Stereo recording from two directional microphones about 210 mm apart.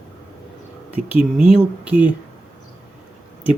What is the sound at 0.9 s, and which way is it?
Speech, 30° left (ahead or behind).